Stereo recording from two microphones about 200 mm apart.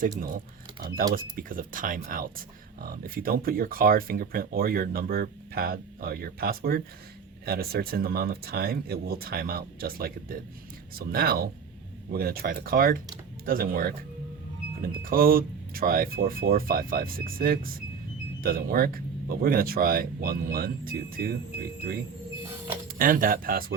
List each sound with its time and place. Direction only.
0.2 s speech: 45° right (ahead or behind)